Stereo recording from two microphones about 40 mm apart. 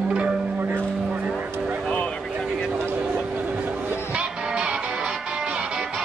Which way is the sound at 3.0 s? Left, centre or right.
Right.